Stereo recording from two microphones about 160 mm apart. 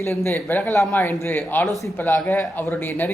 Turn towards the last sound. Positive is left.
turn(degrees=10)  # may be behind; listen again after turning